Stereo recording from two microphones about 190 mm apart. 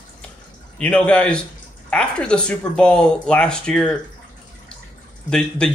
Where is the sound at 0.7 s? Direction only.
5° left (ahead or behind).